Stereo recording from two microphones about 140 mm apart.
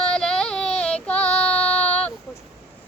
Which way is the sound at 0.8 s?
10° left (ahead or behind).